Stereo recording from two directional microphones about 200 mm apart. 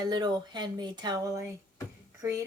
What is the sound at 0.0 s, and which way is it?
Speech, 20° right (ahead or behind).